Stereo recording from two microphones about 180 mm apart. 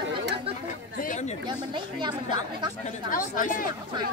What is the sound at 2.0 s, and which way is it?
Speech, 25° right (ahead or behind).